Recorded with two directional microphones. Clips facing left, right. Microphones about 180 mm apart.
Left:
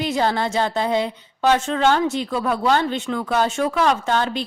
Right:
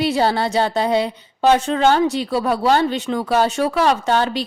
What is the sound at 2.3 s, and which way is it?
A woman's voice, 35° right (ahead or behind).